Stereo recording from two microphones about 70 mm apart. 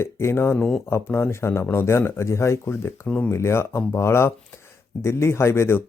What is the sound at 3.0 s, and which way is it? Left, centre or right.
Speech, centre.